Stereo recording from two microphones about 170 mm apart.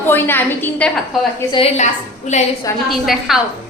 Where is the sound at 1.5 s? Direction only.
40° left (ahead or behind).